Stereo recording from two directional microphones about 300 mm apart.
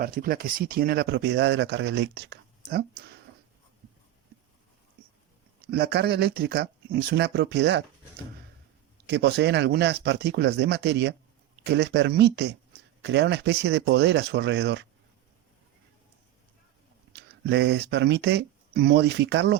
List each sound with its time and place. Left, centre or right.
0.0 s speech: right
5.7 s speech: right
9.0 s speech: right
17.1 s speech: right